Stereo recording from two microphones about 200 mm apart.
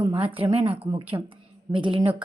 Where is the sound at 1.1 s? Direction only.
20° right (ahead or behind).